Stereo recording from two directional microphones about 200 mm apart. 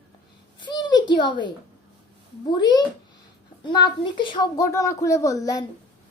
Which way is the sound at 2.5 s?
20° left (ahead or behind).